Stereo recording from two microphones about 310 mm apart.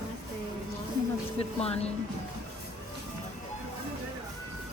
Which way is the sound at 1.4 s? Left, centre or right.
Centre.